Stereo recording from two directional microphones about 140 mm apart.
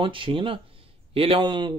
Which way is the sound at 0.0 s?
40° right (ahead or behind).